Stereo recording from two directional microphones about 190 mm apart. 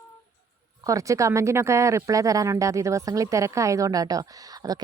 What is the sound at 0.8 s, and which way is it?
Speech, 15° right (ahead or behind).